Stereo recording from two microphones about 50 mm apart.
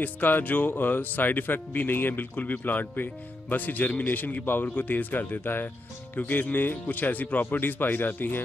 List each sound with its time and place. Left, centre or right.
0.0 s speech: left